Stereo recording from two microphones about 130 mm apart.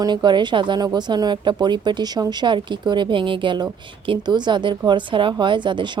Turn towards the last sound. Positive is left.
turn(degrees=-35)  # may be behind; listen again after turning